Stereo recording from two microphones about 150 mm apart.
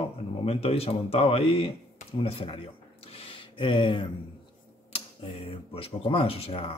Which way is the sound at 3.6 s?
35° left (ahead or behind).